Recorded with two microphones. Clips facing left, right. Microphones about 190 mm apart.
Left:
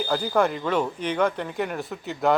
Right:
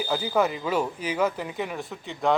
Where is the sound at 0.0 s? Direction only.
5° right (ahead or behind).